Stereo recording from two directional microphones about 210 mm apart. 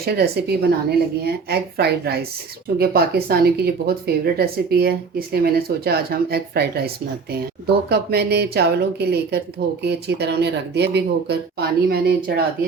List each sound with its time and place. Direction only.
0.0 s a woman's voice: 50° right (ahead or behind)